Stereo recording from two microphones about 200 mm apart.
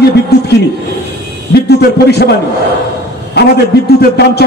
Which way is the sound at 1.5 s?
55° left (ahead or behind).